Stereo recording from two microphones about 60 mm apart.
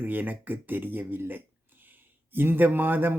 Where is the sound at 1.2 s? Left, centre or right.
Right.